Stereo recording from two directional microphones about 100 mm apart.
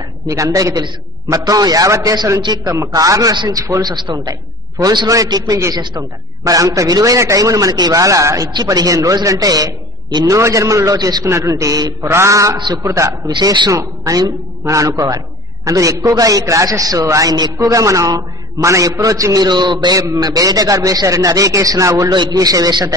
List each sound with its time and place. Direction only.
0.3 s speech: 35° right (ahead or behind)
3.8 s a man's voice: 50° right (ahead or behind)
11.2 s speech: 30° right (ahead or behind)
13.3 s speech: 45° right (ahead or behind)
22.1 s a man's voice: 45° right (ahead or behind)